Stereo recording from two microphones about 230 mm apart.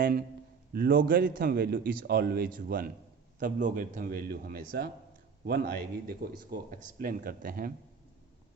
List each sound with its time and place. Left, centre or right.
0.0 s a man's voice: right